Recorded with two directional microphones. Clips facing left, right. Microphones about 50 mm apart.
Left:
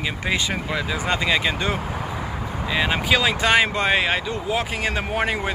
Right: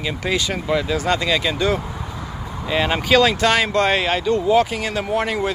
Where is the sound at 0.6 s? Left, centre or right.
Centre.